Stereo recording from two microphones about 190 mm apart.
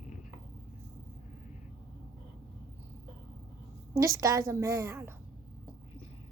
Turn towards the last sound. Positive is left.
turn(degrees=-15)  # may be behind; listen again after turning